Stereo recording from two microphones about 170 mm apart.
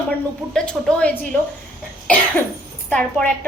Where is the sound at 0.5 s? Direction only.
5° left (ahead or behind).